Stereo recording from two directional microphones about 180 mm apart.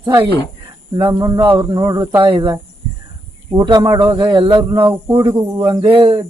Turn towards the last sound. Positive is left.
turn(degrees=-30)  # may be behind; listen again after turning